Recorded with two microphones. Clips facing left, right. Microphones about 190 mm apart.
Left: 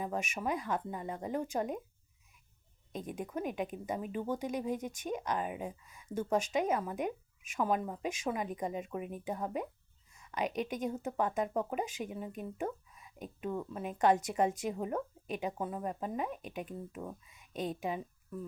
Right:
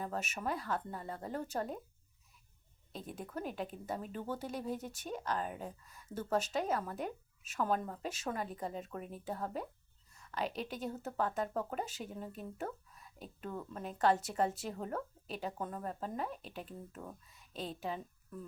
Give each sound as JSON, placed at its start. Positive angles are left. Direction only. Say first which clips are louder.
{"t": 0.0, "sound": "speech", "louder": "left 3 dB", "side_deg": 15}
{"t": 3.1, "sound": "speech", "louder": "left 4 dB", "side_deg": 15}
{"t": 5.8, "sound": "speech", "louder": "left 1 dB", "side_deg": 0}
{"t": 6.1, "sound": "speech", "louder": "left 3 dB", "side_deg": 15}
{"t": 10.1, "sound": "a sound", "louder": "left 1 dB", "side_deg": 0}
{"t": 10.3, "sound": "speech", "louder": "left 4 dB", "side_deg": 15}
{"t": 12.9, "sound": "a sound", "louder": "left 1 dB", "side_deg": 0}
{"t": 13.4, "sound": "a woman's voice", "louder": "left 5 dB", "side_deg": 10}